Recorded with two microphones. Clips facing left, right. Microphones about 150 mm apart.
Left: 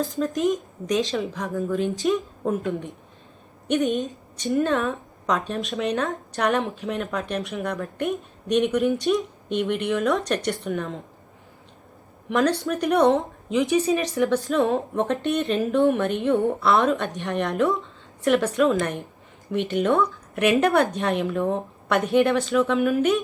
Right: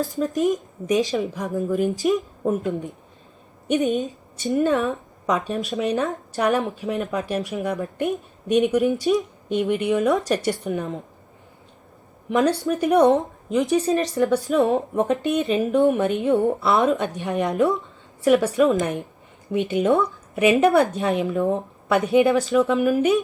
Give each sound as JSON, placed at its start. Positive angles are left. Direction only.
{"t": 0.0, "sound": "a woman's voice", "side_deg": 0}
{"t": 1.5, "sound": "a woman's voice", "side_deg": -20}
{"t": 1.7, "sound": "a woman's voice", "side_deg": 0}
{"t": 3.9, "sound": "a woman's voice", "side_deg": 0}
{"t": 12.4, "sound": "a woman's voice", "side_deg": 0}
{"t": 20.3, "sound": "a woman's voice", "side_deg": 0}